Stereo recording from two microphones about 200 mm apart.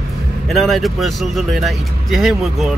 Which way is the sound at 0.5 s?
Centre (ahead or behind).